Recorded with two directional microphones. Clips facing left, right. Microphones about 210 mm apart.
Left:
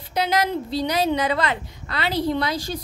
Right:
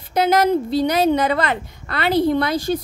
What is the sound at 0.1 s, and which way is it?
A woman's voice, 50° right (ahead or behind).